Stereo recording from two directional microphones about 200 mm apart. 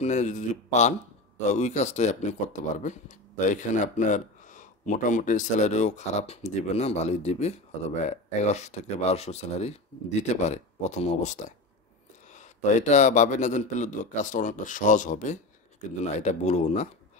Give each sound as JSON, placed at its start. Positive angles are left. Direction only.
{"t": 0.0, "sound": "speech", "side_deg": 35}